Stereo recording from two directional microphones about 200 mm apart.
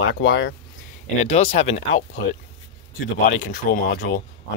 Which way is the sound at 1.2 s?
30° left (ahead or behind).